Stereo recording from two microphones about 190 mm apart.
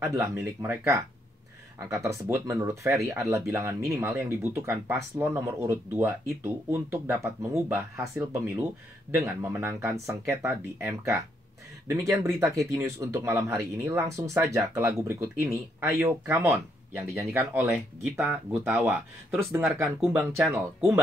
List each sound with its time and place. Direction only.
0.0 s speech: 15° right (ahead or behind)
9.2 s speech: 10° right (ahead or behind)